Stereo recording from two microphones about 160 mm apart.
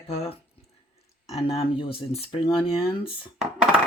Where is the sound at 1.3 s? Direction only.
40° left (ahead or behind).